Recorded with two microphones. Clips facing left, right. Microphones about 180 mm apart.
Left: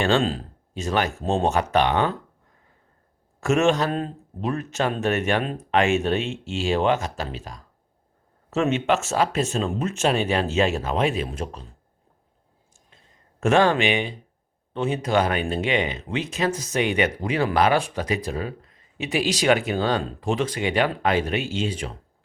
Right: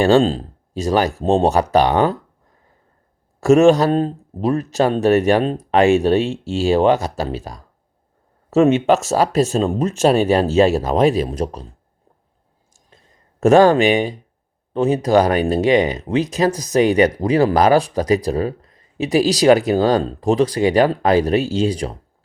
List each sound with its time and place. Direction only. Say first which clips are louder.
0.0 s speech: right 8 dB; 35° right (ahead or behind)
3.4 s speech: right 9 dB; 35° right (ahead or behind)
12.7 s a sound: right 5 dB; 40° right (ahead or behind)
14.7 s speech: right 8 dB; 40° right (ahead or behind)